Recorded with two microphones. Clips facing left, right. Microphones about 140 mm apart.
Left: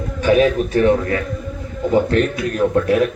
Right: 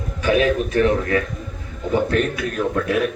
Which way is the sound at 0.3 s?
30° left (ahead or behind).